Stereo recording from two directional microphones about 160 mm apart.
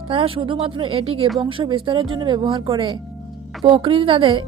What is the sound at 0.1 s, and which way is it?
A woman's voice, 35° right (ahead or behind).